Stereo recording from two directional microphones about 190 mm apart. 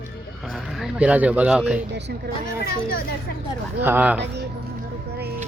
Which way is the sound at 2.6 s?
55° left (ahead or behind).